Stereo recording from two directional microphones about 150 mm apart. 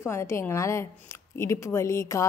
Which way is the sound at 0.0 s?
20° left (ahead or behind).